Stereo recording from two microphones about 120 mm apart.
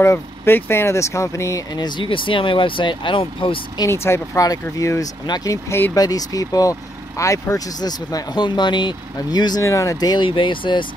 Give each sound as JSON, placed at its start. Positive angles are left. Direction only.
{"t": 0.0, "sound": "speech", "side_deg": 20}
{"t": 3.8, "sound": "speech", "side_deg": 20}